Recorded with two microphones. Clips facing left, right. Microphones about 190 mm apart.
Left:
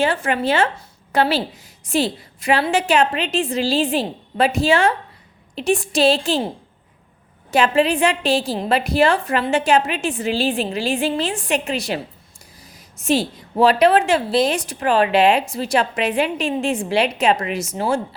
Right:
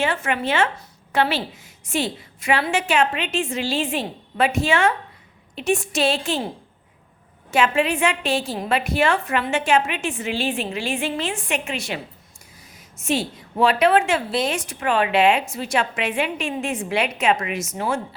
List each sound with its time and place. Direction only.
0.0 s a woman's voice: 35° left (ahead or behind)
7.5 s a woman's voice: 35° left (ahead or behind)
13.0 s a woman's voice: 35° left (ahead or behind)